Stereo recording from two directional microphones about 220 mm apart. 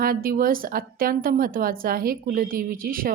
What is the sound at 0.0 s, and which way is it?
Speech, 40° right (ahead or behind).